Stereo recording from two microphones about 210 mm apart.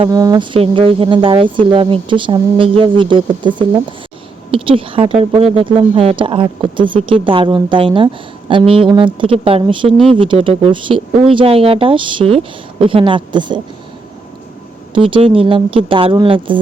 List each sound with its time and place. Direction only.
0.0 s speech: 20° right (ahead or behind)
14.9 s speech: 25° right (ahead or behind)